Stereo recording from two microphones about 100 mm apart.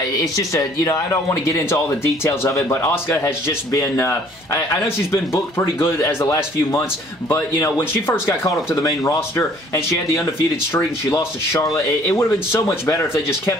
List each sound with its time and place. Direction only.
0.2 s speech: 35° left (ahead or behind)